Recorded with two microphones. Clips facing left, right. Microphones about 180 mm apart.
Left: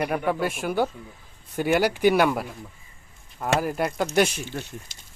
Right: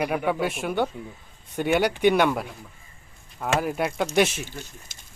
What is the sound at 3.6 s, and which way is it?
Speech, centre (ahead or behind).